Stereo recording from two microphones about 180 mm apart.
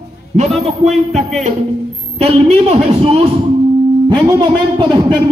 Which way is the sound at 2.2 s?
35° right (ahead or behind).